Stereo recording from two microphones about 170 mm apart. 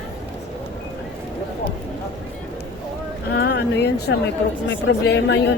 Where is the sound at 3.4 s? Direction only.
75° left (ahead or behind).